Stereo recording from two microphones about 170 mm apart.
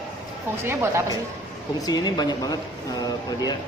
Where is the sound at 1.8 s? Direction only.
20° left (ahead or behind).